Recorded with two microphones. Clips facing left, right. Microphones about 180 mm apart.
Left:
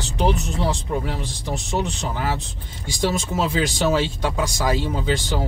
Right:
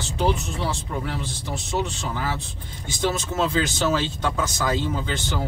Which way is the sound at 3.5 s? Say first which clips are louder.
Left 2 dB; 15° left (ahead or behind).